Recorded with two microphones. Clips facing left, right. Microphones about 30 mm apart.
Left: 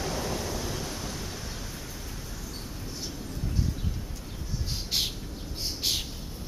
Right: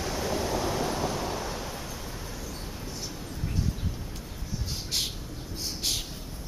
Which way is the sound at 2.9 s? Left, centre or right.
Centre.